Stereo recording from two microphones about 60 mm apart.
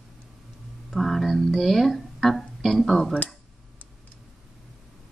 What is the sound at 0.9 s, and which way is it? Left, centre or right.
Speech, centre.